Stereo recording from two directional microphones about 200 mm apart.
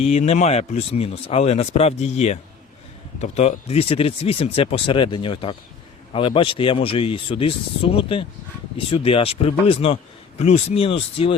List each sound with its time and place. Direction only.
0.0 s a man's voice: 35° left (ahead or behind)